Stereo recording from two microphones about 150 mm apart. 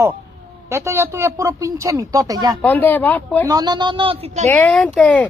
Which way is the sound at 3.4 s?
25° right (ahead or behind).